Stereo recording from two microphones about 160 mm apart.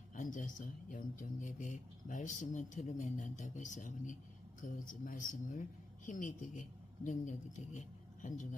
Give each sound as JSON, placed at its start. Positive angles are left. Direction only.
{"t": 0.1, "sound": "speech", "side_deg": 50}